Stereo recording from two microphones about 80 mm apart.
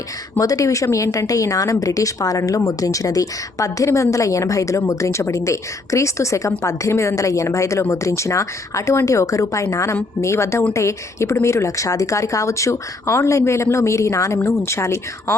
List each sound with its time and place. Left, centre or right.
0.3 s a woman's voice: left